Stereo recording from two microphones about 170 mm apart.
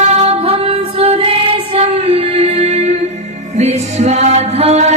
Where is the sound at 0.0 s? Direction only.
35° right (ahead or behind).